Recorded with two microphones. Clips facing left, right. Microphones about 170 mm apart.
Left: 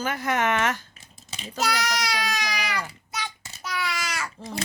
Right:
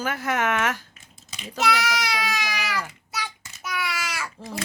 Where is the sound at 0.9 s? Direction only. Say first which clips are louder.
Left 2 dB; 35° left (ahead or behind).